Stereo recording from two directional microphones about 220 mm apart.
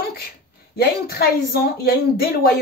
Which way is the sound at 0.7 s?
45° left (ahead or behind).